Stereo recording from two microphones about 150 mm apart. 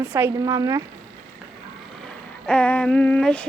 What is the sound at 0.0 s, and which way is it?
Speech, 15° right (ahead or behind).